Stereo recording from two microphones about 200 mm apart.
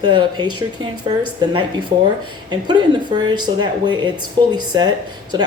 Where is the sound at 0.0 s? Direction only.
25° right (ahead or behind).